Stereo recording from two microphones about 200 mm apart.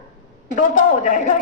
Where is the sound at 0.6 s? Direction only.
40° left (ahead or behind).